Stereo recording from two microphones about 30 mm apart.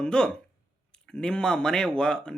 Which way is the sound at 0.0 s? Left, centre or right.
Left.